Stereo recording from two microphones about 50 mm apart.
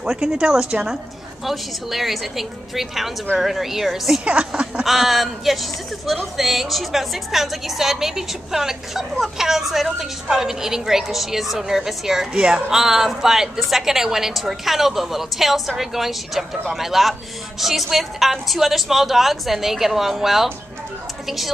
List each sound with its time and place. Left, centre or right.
0.0 s a woman's voice: centre
1.4 s speech: centre
4.2 s speech: right
4.8 s a woman's voice: centre